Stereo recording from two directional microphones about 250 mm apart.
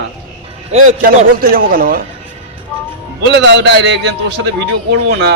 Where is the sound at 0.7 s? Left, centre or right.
Right.